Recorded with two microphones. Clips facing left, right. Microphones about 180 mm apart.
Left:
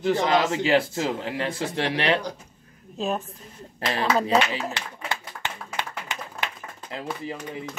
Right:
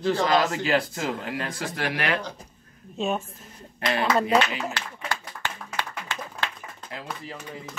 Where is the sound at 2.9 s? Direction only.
Centre (ahead or behind).